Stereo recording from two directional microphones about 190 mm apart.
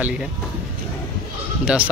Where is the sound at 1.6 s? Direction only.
5° right (ahead or behind).